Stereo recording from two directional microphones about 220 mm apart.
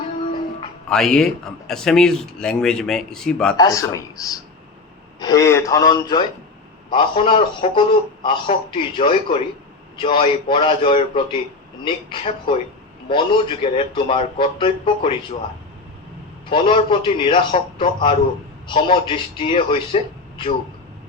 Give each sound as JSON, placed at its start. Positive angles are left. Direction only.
{"t": 0.9, "sound": "speech", "side_deg": 0}
{"t": 3.6, "sound": "a man's voice", "side_deg": 15}
{"t": 16.5, "sound": "a man's voice", "side_deg": 25}